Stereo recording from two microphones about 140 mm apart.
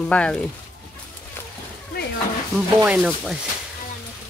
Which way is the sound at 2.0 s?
90° left.